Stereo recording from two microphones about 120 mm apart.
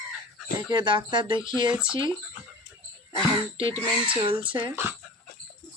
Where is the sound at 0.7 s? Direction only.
40° right (ahead or behind).